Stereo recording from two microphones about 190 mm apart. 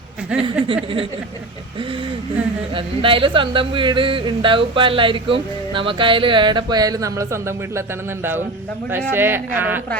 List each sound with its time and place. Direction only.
0.4 s speech: 25° right (ahead or behind)
2.7 s speech: 25° right (ahead or behind); by 9.8 s 10° right (ahead or behind)